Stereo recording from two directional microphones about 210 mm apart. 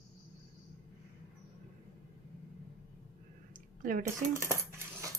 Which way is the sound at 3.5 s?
40° right (ahead or behind).